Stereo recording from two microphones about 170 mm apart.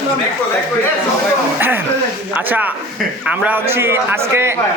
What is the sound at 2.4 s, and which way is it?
A man's voice, 10° right (ahead or behind).